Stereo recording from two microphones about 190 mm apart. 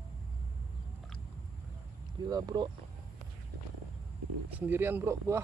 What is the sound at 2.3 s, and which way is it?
Speech, 20° right (ahead or behind).